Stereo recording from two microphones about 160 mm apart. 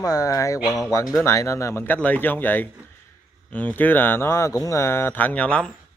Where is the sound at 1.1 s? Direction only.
15° left (ahead or behind).